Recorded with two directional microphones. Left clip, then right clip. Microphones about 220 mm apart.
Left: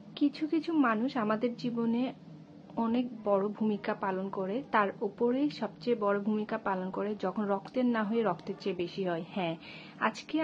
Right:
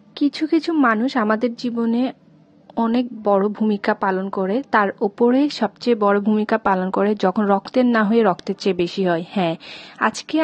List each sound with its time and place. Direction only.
0.2 s a woman's voice: 45° right (ahead or behind)